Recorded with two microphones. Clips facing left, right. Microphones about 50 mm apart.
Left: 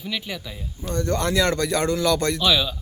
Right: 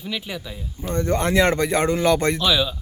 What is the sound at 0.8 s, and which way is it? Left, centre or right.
Speech, right.